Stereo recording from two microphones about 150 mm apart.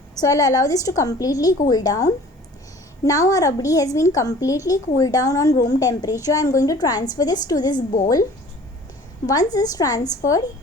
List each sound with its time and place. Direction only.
0.2 s a woman's voice: 20° left (ahead or behind)
9.2 s a woman's voice: 25° left (ahead or behind)